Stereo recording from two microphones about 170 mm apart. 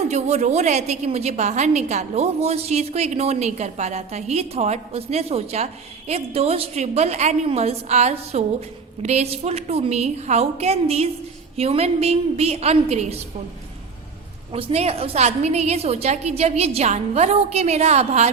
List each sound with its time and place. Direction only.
0.1 s a woman's voice: 40° right (ahead or behind)
14.5 s a woman's voice: 35° right (ahead or behind)